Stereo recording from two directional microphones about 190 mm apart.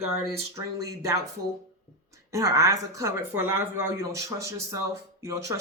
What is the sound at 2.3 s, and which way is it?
Speech, 15° right (ahead or behind).